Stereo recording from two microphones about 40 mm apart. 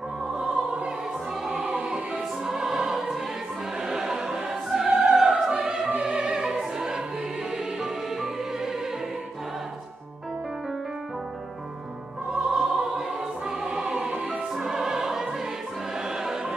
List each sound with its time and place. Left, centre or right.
1.5 s music: centre
1.8 s music: right
2.4 s music: centre
3.9 s opera: centre
7.5 s music: centre
12.3 s music: centre